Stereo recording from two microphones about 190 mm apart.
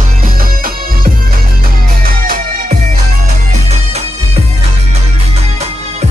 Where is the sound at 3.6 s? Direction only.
35° right (ahead or behind).